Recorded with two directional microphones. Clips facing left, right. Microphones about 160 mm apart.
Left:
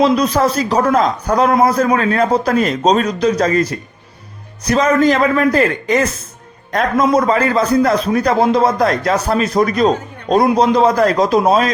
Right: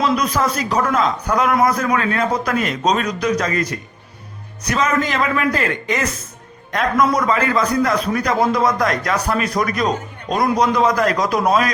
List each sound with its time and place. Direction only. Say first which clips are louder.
0.0 s a man's voice: left 5 dB; 30° left (ahead or behind)